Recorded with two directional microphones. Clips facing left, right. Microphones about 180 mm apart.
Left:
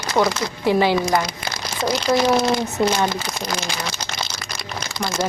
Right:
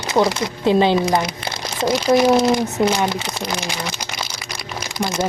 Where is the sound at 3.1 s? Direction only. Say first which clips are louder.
Right 1 dB; 25° right (ahead or behind).